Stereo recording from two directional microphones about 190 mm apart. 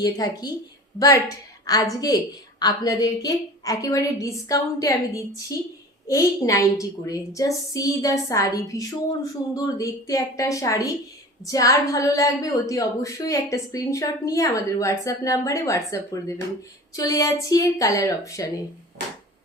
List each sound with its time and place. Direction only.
0.0 s a woman's voice: 20° left (ahead or behind)